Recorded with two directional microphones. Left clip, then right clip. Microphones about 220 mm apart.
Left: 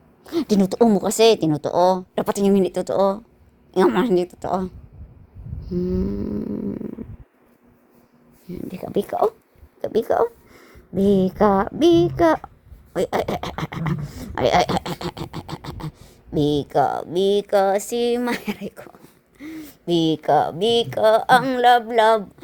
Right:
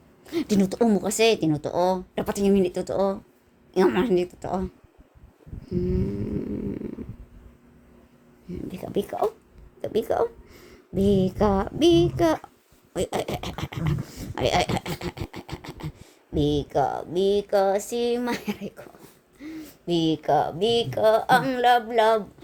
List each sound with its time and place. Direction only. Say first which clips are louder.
0.3 s speech: left 4 dB; 25° left (ahead or behind)
5.6 s snoring: left 3 dB; 25° left (ahead or behind)
8.4 s speech: left 3 dB; 25° left (ahead or behind)
9.8 s snoring: left 5 dB; 25° left (ahead or behind)
10.5 s a sound: left 1 dB; 5° right (ahead or behind)
10.9 s a child's voice: left 4 dB; 15° left (ahead or behind); by 22.2 s 35° left (ahead or behind)